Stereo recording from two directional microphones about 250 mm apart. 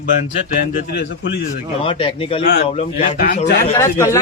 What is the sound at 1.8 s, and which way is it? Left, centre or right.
Speech, left.